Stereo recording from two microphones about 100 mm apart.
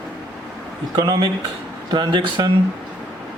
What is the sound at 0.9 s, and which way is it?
Speech, 50° right (ahead or behind).